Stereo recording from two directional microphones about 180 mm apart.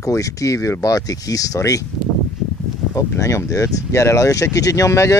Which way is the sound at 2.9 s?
15° left (ahead or behind).